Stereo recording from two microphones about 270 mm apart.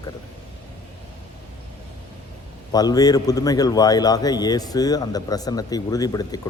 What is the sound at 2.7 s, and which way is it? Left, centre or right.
A man's voice, centre.